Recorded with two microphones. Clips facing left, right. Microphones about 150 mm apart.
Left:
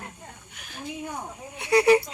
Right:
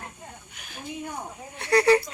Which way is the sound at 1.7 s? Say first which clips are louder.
Left 1 dB; 20° left (ahead or behind).